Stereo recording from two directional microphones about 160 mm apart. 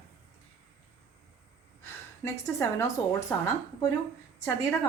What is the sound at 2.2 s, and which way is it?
Speech, 20° left (ahead or behind).